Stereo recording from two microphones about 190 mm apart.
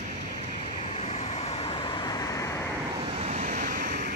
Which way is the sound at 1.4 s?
30° left (ahead or behind).